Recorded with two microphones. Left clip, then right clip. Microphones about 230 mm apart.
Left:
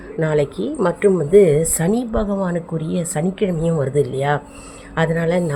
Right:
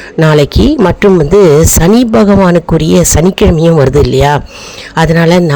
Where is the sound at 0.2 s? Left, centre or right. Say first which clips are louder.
Right 11 dB; right.